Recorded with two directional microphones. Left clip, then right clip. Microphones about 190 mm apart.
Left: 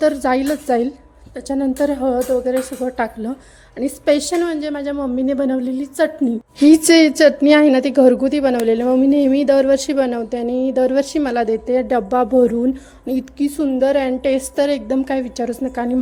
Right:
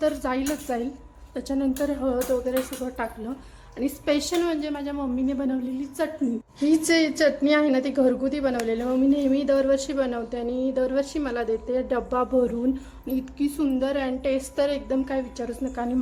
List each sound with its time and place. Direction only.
0.0 s a woman's voice: 30° left (ahead or behind)
6.6 s a woman's voice: 45° left (ahead or behind)